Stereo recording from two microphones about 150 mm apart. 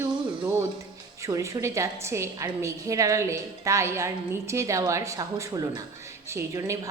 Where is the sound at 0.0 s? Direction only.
20° right (ahead or behind).